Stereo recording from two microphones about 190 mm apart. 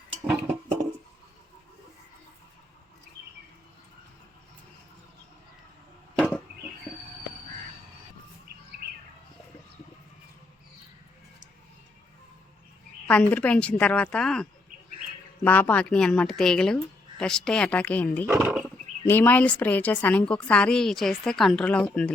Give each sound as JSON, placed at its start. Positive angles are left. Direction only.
{"t": 6.1, "sound": "chop", "side_deg": 5}
{"t": 13.1, "sound": "a woman's voice", "side_deg": 5}
{"t": 15.4, "sound": "a woman's voice", "side_deg": 10}
{"t": 18.3, "sound": "roaring cats", "side_deg": -5}
{"t": 19.0, "sound": "a woman's voice", "side_deg": 10}